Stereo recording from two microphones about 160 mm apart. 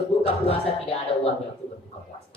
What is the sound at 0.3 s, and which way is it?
Speech, 35° left (ahead or behind).